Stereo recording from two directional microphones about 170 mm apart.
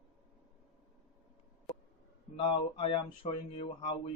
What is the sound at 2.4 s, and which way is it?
Speech, 30° left (ahead or behind).